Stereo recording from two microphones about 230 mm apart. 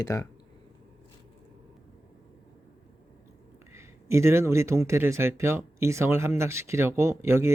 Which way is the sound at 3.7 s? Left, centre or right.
Centre.